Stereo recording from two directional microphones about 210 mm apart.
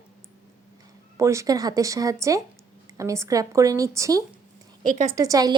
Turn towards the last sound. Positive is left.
turn(degrees=-15)  # may be behind; listen again after turning